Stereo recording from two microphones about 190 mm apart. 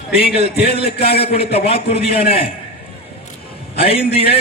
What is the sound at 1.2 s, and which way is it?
Speech, 30° left (ahead or behind).